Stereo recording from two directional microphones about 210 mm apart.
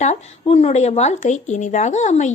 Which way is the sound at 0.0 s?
30° left (ahead or behind).